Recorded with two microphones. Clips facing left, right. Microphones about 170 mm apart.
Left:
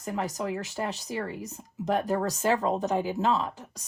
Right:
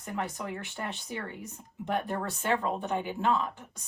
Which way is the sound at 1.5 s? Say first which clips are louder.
Left 4 dB; 40° left (ahead or behind).